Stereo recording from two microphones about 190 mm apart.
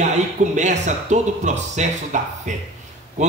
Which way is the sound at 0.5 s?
40° right (ahead or behind).